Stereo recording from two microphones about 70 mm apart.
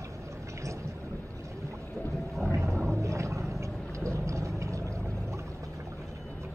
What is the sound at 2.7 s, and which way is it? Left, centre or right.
Gargling, centre.